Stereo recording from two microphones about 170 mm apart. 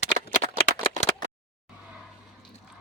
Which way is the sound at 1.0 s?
40° left (ahead or behind).